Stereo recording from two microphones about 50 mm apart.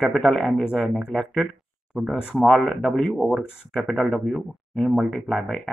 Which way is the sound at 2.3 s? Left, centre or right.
Centre.